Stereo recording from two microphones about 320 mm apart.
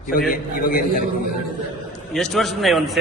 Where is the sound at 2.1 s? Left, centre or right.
Centre.